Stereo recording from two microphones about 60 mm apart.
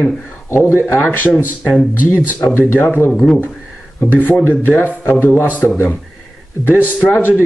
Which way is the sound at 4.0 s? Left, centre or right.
Left.